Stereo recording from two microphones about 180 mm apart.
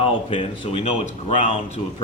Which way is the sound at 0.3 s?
30° left (ahead or behind).